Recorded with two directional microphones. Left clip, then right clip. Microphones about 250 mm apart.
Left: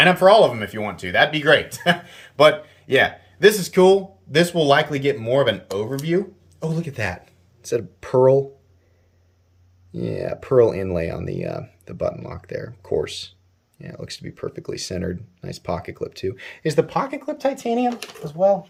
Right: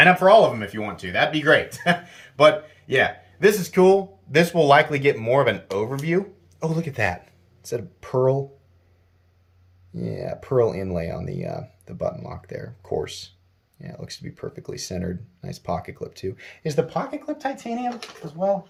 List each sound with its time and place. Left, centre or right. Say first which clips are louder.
0.0 s speech: left 1 dB; centre
7.6 s speech: left 5 dB; centre
9.9 s speech: left 4 dB; centre
17.5 s speech: left 6 dB; left